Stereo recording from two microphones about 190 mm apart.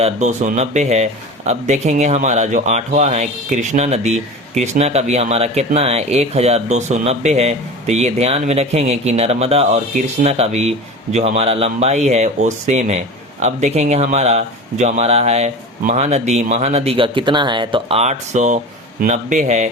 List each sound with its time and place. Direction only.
0.0 s speech: 40° right (ahead or behind)